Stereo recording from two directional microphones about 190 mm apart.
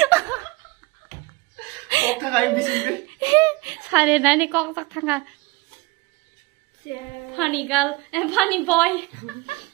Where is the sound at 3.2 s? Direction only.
20° right (ahead or behind).